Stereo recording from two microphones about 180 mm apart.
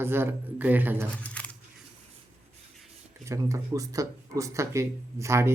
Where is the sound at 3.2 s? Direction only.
15° right (ahead or behind).